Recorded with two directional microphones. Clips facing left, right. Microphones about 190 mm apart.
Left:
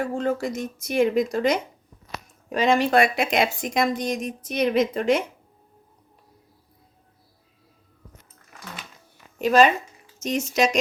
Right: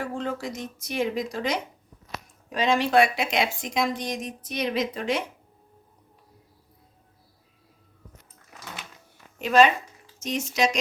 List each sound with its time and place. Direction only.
0.0 s a woman's voice: 45° left (ahead or behind)
9.4 s a woman's voice: 40° left (ahead or behind)